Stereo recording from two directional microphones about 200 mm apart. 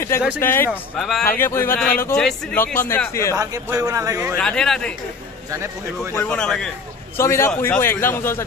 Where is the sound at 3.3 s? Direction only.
15° right (ahead or behind).